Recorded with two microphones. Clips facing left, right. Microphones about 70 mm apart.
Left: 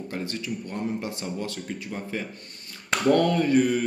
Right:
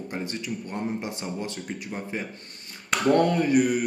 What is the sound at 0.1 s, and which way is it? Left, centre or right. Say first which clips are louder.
Speech: even; right.